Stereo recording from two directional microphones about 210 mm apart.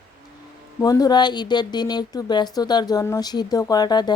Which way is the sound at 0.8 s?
15° left (ahead or behind).